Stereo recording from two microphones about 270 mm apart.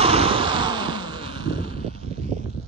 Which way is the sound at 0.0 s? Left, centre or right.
Right.